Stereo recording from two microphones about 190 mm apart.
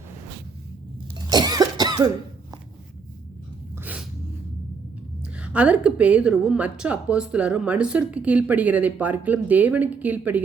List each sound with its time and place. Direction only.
1.3 s cough: 20° right (ahead or behind)
3.8 s dog: 10° right (ahead or behind)
5.2 s a woman's voice: 5° right (ahead or behind)